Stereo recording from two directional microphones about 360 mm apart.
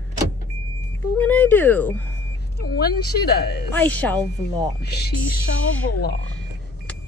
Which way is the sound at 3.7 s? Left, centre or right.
Centre.